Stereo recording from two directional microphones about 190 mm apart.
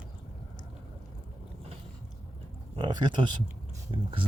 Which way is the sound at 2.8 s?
20° right (ahead or behind).